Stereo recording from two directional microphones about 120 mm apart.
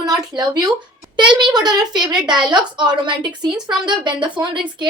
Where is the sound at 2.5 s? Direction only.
40° right (ahead or behind).